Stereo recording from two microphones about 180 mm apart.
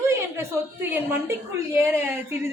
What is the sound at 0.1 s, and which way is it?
A woman's voice, 15° right (ahead or behind).